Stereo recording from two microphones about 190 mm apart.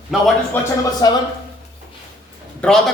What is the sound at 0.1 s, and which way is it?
Speech, centre (ahead or behind).